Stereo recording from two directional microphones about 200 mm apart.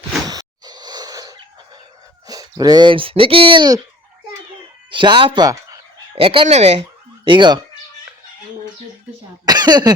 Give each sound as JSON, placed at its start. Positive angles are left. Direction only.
{"t": 0.3, "sound": "a sound", "side_deg": -20}
{"t": 2.2, "sound": "speech", "side_deg": -20}
{"t": 4.9, "sound": "speech", "side_deg": -25}
{"t": 9.5, "sound": "cough", "side_deg": -20}